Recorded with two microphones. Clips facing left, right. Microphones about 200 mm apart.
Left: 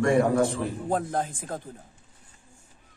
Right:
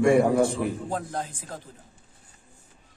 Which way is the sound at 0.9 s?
50° left (ahead or behind).